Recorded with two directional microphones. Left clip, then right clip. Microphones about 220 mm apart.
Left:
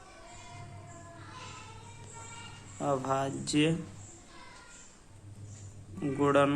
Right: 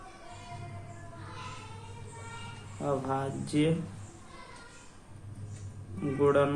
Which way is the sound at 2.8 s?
40° left (ahead or behind).